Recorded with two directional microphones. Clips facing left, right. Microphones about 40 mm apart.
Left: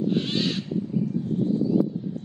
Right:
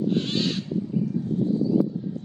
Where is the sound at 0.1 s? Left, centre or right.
Centre.